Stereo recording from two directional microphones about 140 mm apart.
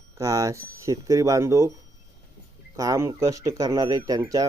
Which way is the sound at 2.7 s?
25° right (ahead or behind).